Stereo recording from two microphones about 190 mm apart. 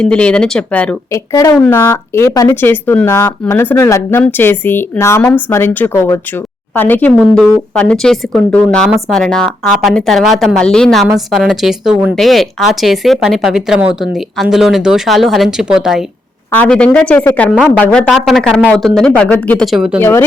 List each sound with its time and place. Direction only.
0.0 s speech: 5° left (ahead or behind)
1.3 s speech: 20° left (ahead or behind)
1.5 s speech: 5° left (ahead or behind)
20.0 s speech: 10° left (ahead or behind)